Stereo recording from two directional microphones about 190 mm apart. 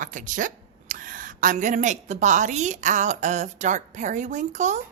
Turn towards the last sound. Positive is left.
turn(degrees=-40)  # may be behind; listen again after turning